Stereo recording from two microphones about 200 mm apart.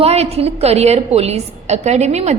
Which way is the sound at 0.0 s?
30° right (ahead or behind).